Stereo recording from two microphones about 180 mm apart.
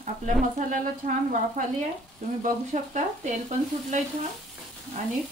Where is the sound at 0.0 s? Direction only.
45° right (ahead or behind).